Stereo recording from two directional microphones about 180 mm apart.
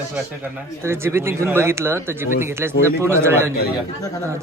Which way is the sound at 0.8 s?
15° right (ahead or behind).